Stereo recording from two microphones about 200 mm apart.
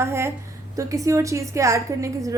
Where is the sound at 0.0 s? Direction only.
15° right (ahead or behind).